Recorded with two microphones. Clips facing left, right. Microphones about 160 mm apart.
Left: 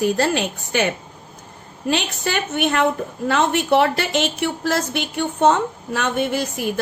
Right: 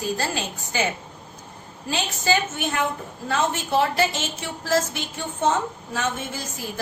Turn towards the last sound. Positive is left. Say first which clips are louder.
# left 10 dB
turn(degrees=70)  # may be behind; listen again after turning